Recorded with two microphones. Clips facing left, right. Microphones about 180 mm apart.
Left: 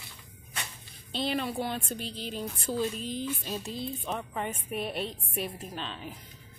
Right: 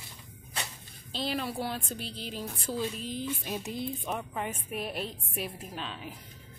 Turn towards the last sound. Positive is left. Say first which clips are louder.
# left 1 dB
turn(degrees=-5)  # may be behind; listen again after turning